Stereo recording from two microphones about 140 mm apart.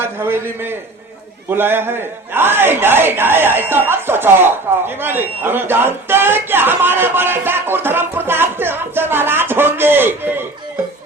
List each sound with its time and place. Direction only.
0.0 s a man's voice: 15° right (ahead or behind)